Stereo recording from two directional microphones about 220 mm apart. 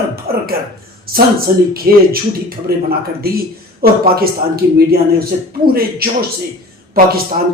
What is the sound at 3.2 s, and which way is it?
A man's voice, 45° right (ahead or behind).